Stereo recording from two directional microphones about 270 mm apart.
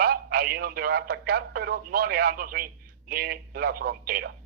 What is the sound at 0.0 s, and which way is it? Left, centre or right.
A man's voice, right.